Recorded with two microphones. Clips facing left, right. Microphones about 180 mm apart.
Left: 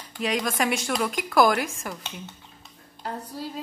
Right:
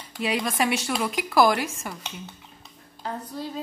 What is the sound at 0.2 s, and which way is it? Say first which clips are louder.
Speech: even; 5° right (ahead or behind).